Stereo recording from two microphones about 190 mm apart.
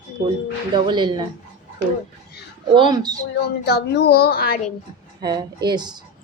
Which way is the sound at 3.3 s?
60° left (ahead or behind).